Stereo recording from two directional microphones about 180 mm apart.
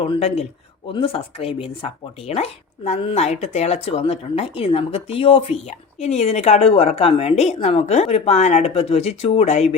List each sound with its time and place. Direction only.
0.0 s speech: 35° left (ahead or behind)